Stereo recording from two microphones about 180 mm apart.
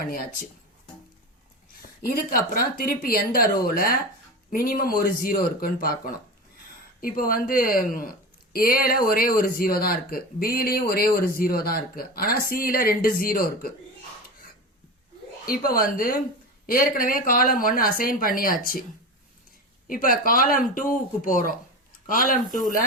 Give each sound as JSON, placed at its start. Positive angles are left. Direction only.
{"t": 0.0, "sound": "speech", "side_deg": 55}
{"t": 1.7, "sound": "speech", "side_deg": 55}
{"t": 15.4, "sound": "speech", "side_deg": 55}
{"t": 19.9, "sound": "speech", "side_deg": 50}